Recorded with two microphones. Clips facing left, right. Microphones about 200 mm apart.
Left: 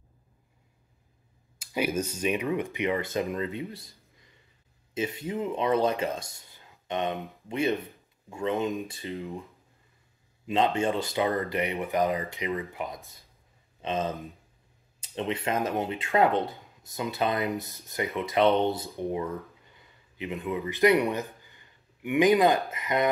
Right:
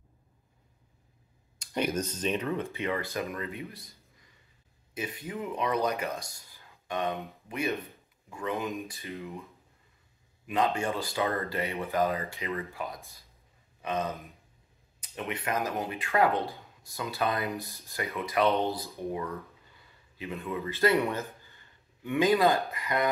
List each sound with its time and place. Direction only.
1.6 s speech: 5° left (ahead or behind); by 3.9 s 25° left (ahead or behind)
4.9 s speech: 25° left (ahead or behind)
10.4 s speech: 25° left (ahead or behind)